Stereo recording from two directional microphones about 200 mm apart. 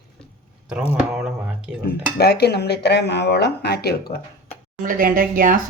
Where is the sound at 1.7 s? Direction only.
5° right (ahead or behind).